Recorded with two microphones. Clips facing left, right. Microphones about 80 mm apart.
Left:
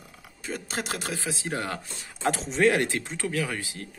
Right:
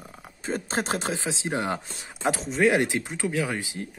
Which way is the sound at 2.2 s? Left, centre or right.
Centre.